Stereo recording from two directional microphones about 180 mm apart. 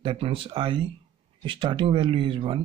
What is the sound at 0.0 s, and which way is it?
Speech, 30° right (ahead or behind).